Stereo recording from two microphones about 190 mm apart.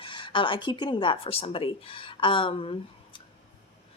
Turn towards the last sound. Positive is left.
turn(degrees=30)  # may be behind; listen again after turning